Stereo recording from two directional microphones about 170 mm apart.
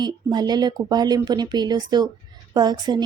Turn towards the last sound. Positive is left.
turn(degrees=-25)  # may be behind; listen again after turning